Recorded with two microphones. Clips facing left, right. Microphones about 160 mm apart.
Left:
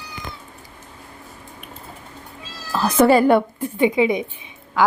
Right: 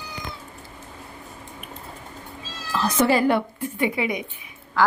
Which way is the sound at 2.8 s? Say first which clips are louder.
Left 6 dB; 60° left (ahead or behind).